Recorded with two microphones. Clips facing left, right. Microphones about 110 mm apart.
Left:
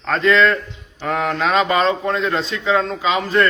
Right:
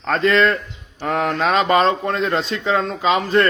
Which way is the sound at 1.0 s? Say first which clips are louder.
Even; 45° right (ahead or behind).